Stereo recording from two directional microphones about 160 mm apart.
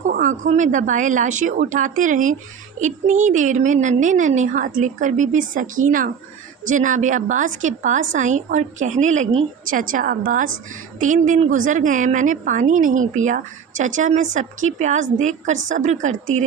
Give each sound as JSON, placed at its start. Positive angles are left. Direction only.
{"t": 0.1, "sound": "a woman's voice", "side_deg": -55}